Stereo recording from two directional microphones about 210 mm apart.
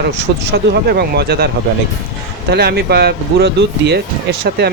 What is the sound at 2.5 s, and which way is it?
Speech, 50° right (ahead or behind).